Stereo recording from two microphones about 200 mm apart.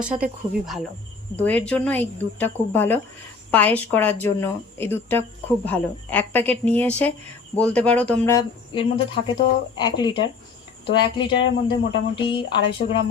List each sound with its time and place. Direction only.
0.0 s speech: 5° right (ahead or behind)
1.4 s speech: 5° left (ahead or behind)
8.7 s speech: 25° left (ahead or behind)